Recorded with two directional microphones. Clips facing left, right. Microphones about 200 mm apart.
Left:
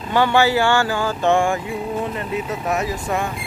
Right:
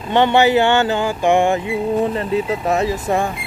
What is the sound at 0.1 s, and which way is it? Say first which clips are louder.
Speech: right 3 dB; 20° right (ahead or behind).